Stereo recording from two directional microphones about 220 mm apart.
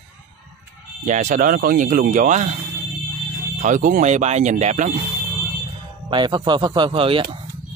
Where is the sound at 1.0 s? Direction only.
35° right (ahead or behind).